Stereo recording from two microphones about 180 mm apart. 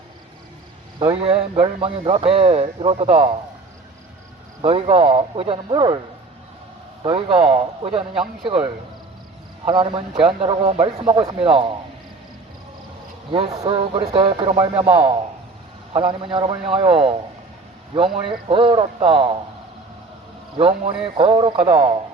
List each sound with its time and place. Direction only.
1.2 s speech: 35° right (ahead or behind)
4.6 s a man's voice: 30° right (ahead or behind)
7.0 s a man's voice: 25° right (ahead or behind)
13.3 s a man's voice: 30° right (ahead or behind)
15.9 s a man's voice: 30° right (ahead or behind)
20.6 s a man's voice: 30° right (ahead or behind)